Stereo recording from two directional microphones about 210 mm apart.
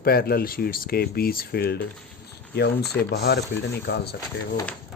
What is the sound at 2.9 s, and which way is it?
Speech, 50° left (ahead or behind).